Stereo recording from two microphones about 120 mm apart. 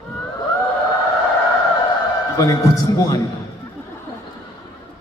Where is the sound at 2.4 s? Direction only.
30° left (ahead or behind).